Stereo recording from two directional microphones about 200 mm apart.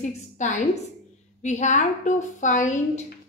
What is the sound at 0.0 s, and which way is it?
A woman's voice, 35° left (ahead or behind).